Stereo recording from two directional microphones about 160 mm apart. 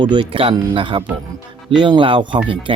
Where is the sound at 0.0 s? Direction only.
30° right (ahead or behind).